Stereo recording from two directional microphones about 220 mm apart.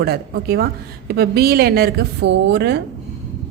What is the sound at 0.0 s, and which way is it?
A woman's voice, 45° right (ahead or behind).